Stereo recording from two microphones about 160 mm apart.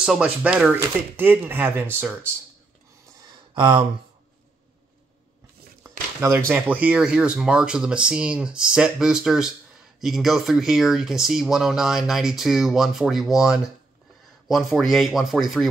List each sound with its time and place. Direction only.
0.0 s speech: 5° right (ahead or behind)
3.5 s speech: 30° right (ahead or behind)
5.9 s speech: 15° right (ahead or behind); by 15.6 s centre (ahead or behind)